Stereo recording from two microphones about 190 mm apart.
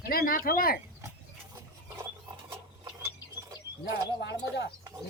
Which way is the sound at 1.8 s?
10° right (ahead or behind).